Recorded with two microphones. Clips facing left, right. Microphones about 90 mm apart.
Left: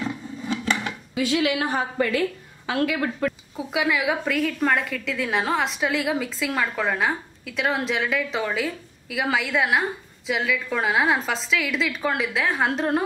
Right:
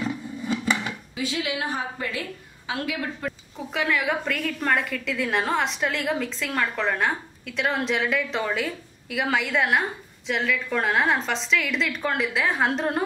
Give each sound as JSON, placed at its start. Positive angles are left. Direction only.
{"t": 0.0, "sound": "a sound", "side_deg": -5}
{"t": 1.1, "sound": "a woman's voice", "side_deg": 75}
{"t": 3.5, "sound": "a woman's voice", "side_deg": 5}